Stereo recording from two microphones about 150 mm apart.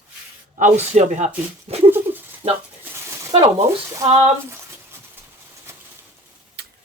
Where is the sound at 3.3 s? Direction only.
40° right (ahead or behind).